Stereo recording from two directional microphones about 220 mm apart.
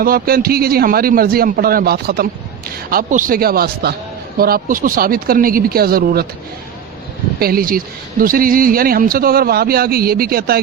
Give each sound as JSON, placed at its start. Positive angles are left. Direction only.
{"t": 0.0, "sound": "a man's voice", "side_deg": -40}
{"t": 7.3, "sound": "a man's voice", "side_deg": -45}